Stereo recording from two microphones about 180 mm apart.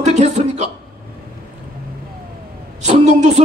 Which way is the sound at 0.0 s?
40° right (ahead or behind).